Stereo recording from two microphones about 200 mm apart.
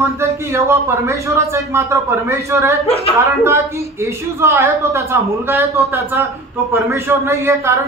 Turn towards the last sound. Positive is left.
turn(degrees=-15)  # may be behind; listen again after turning